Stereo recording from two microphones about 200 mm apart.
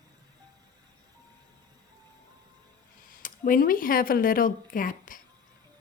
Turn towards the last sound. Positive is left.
turn(degrees=45)  # may be behind; listen again after turning